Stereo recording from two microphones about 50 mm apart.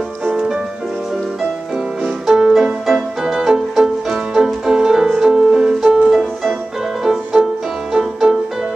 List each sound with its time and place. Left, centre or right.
0.3 s music: centre
2.0 s music: centre